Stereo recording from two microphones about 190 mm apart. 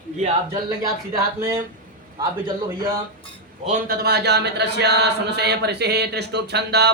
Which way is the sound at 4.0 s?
60° right (ahead or behind).